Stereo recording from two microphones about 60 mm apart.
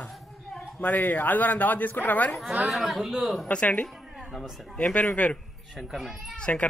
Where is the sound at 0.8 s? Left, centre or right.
Left.